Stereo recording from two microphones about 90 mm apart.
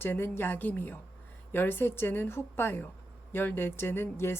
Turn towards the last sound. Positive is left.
turn(degrees=25)  # may be behind; listen again after turning